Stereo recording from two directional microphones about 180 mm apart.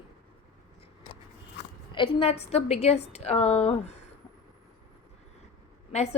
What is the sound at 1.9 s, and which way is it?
A woman's voice, 30° left (ahead or behind).